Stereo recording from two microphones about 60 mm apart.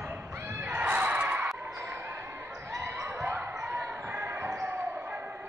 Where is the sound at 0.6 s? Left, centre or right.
Right.